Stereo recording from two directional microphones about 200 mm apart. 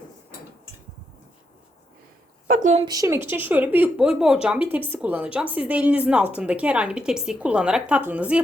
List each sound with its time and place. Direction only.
2.5 s a woman's voice: 40° right (ahead or behind)
2.8 s a woman's voice: 15° right (ahead or behind)